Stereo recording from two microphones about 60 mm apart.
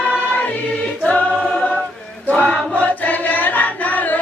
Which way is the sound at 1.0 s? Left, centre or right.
Left.